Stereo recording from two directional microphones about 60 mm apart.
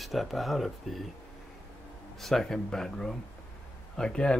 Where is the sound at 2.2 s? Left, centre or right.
Centre.